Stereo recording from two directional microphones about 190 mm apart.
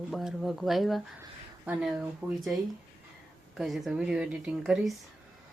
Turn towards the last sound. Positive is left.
turn(degrees=0)  # may be behind; listen again after turning